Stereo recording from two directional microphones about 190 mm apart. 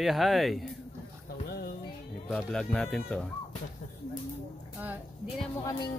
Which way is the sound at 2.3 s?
Centre (ahead or behind).